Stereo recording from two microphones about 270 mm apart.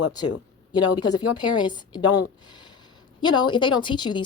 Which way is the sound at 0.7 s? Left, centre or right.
Centre.